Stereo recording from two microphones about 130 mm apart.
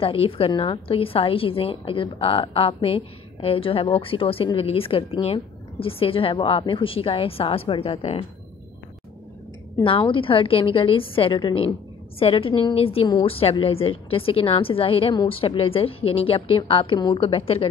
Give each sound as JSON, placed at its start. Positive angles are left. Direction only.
{"t": 0.0, "sound": "a woman's voice", "side_deg": 45}
{"t": 9.8, "sound": "a woman's voice", "side_deg": 40}